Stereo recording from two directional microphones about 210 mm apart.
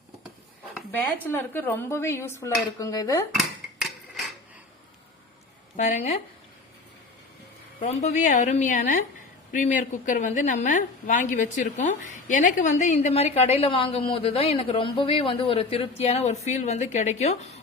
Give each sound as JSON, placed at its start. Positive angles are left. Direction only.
{"t": 0.9, "sound": "dishes", "side_deg": 10}
{"t": 5.7, "sound": "a woman's voice", "side_deg": 35}
{"t": 7.8, "sound": "a woman's voice", "side_deg": 35}